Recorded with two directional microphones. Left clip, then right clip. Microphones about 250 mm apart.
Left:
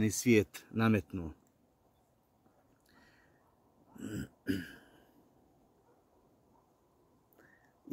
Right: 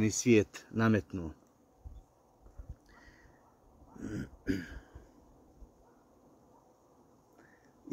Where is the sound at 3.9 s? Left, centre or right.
Left.